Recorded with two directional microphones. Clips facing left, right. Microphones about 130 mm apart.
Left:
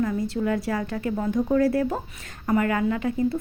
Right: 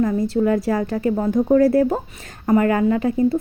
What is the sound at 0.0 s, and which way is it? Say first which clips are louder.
Speech: right 6 dB; 40° right (ahead or behind).